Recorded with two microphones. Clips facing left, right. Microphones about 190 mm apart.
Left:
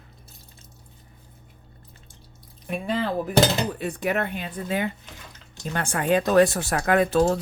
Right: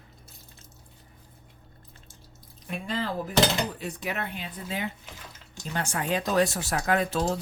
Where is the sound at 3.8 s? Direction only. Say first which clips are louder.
Left 7 dB; 55° left (ahead or behind).